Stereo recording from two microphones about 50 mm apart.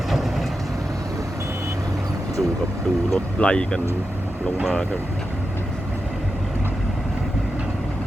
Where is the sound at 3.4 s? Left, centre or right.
Centre.